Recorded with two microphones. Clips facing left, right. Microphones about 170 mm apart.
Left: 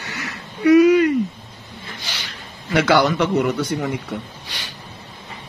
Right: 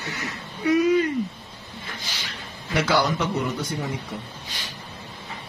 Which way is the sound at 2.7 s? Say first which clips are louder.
Left 6 dB; 75° left (ahead or behind).